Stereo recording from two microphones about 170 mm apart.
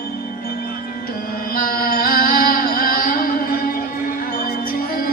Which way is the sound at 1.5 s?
60° left (ahead or behind).